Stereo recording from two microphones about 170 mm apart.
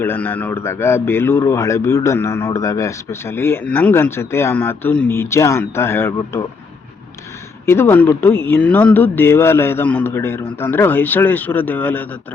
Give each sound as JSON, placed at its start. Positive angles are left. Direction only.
{"t": 0.0, "sound": "a man's voice", "side_deg": 10}
{"t": 7.6, "sound": "a man's voice", "side_deg": 15}